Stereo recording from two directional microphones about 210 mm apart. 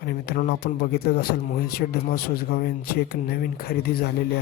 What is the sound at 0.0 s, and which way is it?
Speech, 50° left (ahead or behind).